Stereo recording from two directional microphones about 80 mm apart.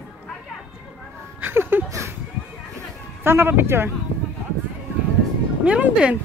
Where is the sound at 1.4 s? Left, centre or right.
Right.